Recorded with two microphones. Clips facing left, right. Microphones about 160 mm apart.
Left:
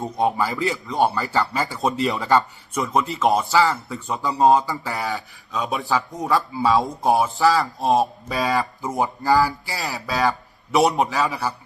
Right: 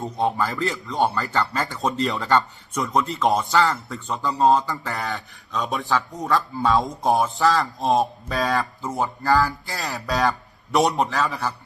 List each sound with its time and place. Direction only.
0.0 s speech: 15° left (ahead or behind)
0.4 s speech: 5° left (ahead or behind)
4.0 s speech: 15° left (ahead or behind)
8.8 s speech: 10° left (ahead or behind)